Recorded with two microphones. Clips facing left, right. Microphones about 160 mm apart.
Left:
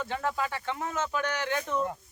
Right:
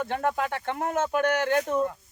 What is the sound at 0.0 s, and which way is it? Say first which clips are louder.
Speech: right 4 dB; 55° right (ahead or behind).